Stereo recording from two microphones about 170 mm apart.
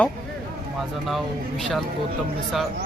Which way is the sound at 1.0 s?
Centre (ahead or behind).